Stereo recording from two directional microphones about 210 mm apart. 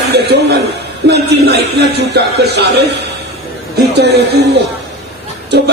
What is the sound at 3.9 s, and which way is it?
Speech, 50° right (ahead or behind).